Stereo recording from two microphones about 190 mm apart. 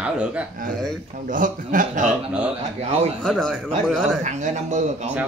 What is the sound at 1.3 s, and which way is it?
Speech, 45° right (ahead or behind).